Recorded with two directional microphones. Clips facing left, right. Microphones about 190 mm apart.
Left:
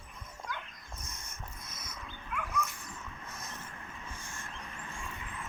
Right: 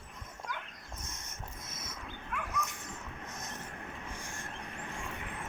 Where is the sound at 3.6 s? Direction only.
55° right (ahead or behind).